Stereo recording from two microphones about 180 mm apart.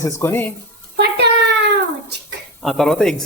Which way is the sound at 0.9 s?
65° right (ahead or behind).